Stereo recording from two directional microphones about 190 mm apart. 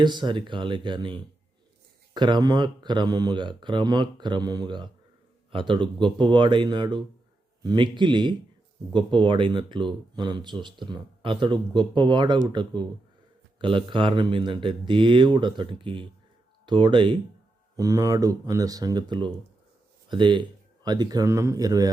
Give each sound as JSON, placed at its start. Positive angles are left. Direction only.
{"t": 0.0, "sound": "speech", "side_deg": -25}
{"t": 13.6, "sound": "speech", "side_deg": -25}